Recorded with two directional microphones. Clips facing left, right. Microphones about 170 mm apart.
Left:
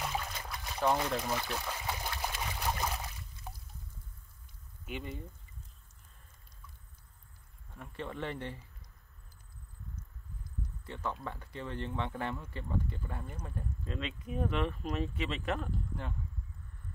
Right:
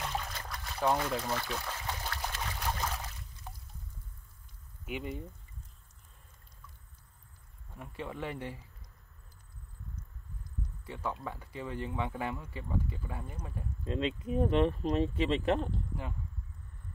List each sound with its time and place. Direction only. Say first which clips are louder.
0.0 s trickle: even; 5° left (ahead or behind)
4.8 s speech: right 3 dB; 10° right (ahead or behind)
7.7 s speech: even; 10° right (ahead or behind)
10.9 s speech: right 1 dB; 10° right (ahead or behind)
13.8 s speech: right 9 dB; 25° right (ahead or behind)